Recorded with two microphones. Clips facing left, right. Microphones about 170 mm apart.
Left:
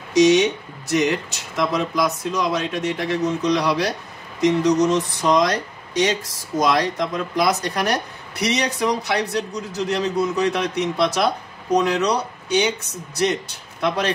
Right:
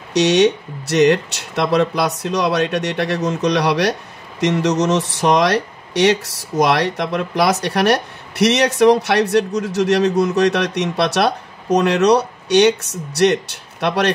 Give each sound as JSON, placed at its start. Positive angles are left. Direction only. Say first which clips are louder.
{"t": 0.1, "sound": "speech", "louder": "right 1 dB", "side_deg": -75}